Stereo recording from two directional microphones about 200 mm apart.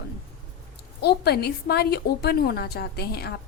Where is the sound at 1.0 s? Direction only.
55° left (ahead or behind).